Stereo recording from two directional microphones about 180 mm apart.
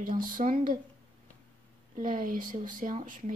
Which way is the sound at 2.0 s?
50° right (ahead or behind).